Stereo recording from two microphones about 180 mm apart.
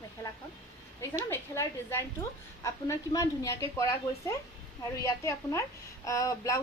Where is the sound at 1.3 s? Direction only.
15° left (ahead or behind).